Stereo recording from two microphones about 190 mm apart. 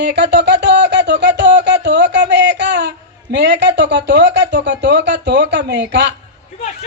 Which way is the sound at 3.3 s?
65° right (ahead or behind).